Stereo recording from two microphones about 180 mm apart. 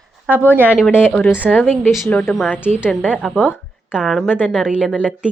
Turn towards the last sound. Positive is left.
turn(degrees=-5)  # may be behind; listen again after turning